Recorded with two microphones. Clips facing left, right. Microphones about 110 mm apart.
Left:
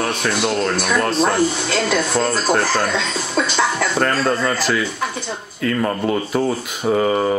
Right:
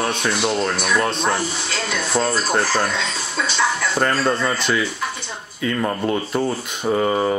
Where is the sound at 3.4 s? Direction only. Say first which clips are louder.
Left 5 dB; 50° left (ahead or behind).